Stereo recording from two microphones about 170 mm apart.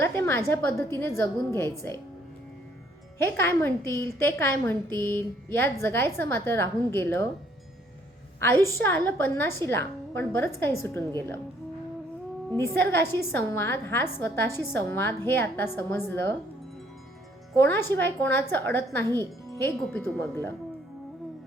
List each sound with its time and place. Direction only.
0.0 s a woman's voice: 15° left (ahead or behind)
3.2 s a woman's voice: 15° left (ahead or behind)
8.8 s a woman's voice: 10° left (ahead or behind)
12.5 s a woman's voice: 15° left (ahead or behind)
17.6 s a woman's voice: 15° left (ahead or behind)